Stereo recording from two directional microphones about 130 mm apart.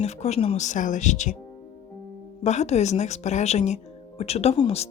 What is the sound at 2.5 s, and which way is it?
Speech, 60° left (ahead or behind).